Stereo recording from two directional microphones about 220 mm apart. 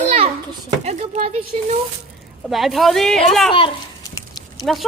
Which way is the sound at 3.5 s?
20° left (ahead or behind).